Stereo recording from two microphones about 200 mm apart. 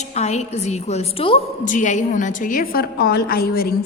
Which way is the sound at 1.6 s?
40° left (ahead or behind).